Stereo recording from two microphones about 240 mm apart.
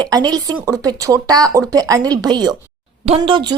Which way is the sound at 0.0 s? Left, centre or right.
Centre.